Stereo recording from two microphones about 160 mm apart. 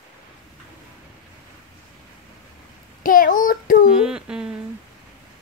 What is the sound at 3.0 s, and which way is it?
Child singing, 60° left (ahead or behind).